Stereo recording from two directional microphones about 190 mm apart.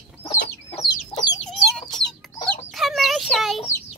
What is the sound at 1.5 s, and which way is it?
Chicken, 5° left (ahead or behind).